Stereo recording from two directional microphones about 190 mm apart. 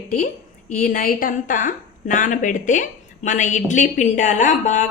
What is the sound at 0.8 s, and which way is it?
A woman's voice, 50° left (ahead or behind).